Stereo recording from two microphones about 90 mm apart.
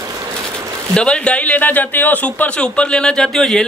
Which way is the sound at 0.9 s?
10° left (ahead or behind).